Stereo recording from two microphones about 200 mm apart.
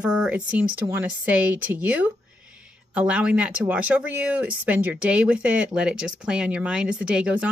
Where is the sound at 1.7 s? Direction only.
10° right (ahead or behind).